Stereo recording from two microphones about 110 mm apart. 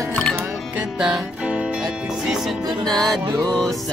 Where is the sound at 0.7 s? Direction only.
5° right (ahead or behind).